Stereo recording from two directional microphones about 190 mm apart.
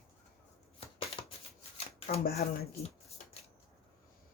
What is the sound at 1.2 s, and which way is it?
Shuffling cards, 25° left (ahead or behind).